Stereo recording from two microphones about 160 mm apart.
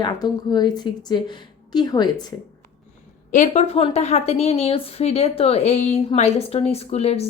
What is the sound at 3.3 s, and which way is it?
Speech, 45° left (ahead or behind).